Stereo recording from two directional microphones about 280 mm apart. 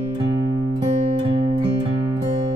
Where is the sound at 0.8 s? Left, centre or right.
Centre.